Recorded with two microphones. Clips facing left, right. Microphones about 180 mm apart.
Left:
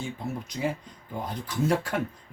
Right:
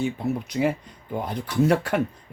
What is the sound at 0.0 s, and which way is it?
Speech, 65° right (ahead or behind).